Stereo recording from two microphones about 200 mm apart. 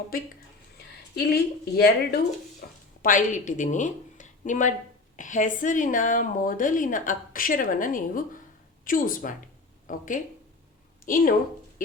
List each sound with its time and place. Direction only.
1.1 s speech: 50° left (ahead or behind)
3.0 s a woman's voice: 40° left (ahead or behind)